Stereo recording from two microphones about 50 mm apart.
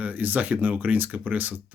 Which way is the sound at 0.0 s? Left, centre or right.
Right.